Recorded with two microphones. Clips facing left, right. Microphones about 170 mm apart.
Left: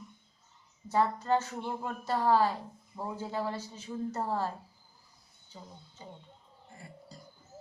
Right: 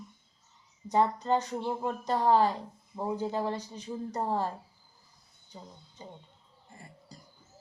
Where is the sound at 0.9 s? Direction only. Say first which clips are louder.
Right 2 dB; 15° right (ahead or behind).